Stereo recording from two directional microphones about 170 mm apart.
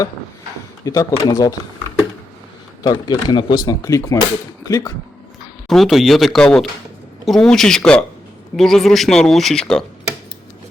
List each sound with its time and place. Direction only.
0.9 s speech: 20° left (ahead or behind)
2.8 s speech: 25° left (ahead or behind)
5.6 s speech: centre (ahead or behind)